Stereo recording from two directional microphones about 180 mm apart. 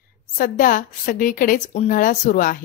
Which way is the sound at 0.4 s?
45° left (ahead or behind).